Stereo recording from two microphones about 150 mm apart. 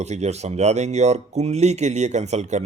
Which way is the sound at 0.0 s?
50° right (ahead or behind).